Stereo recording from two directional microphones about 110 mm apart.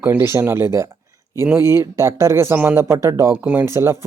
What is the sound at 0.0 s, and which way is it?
Speech, 25° right (ahead or behind).